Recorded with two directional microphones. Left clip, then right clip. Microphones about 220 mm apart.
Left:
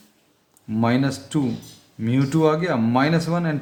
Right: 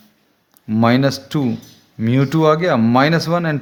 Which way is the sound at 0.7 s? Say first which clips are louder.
Right 7 dB; 40° right (ahead or behind).